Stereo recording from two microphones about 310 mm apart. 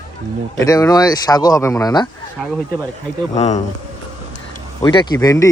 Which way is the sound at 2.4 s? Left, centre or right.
Centre.